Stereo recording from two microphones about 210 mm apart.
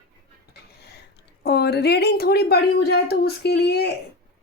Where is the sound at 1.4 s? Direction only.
50° left (ahead or behind).